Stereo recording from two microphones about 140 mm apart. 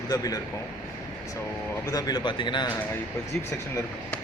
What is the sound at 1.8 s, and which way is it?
Speech, 25° left (ahead or behind).